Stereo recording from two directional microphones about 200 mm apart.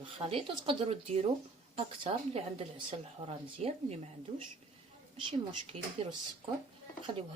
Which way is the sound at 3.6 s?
30° right (ahead or behind).